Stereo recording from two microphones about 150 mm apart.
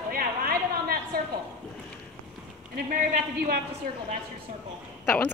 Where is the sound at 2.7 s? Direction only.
75° right (ahead or behind).